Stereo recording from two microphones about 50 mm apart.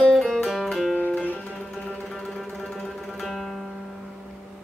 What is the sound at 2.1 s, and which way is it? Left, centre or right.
Music, centre.